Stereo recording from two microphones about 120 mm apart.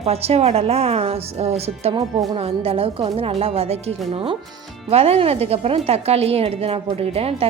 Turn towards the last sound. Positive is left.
turn(degrees=-55)  # may be behind; listen again after turning